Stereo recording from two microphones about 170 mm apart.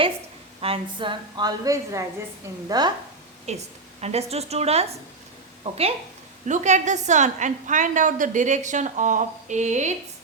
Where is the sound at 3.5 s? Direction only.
40° right (ahead or behind).